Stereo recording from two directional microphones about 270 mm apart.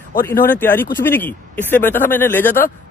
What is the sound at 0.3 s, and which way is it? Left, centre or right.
Speech, centre.